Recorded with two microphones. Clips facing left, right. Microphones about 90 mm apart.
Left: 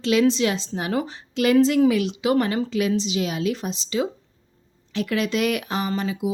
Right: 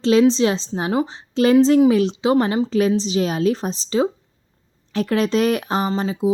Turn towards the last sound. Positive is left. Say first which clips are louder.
# right 5 dB
turn(degrees=-30)  # may be behind; listen again after turning